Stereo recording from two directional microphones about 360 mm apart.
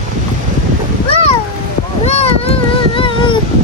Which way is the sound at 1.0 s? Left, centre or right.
Centre.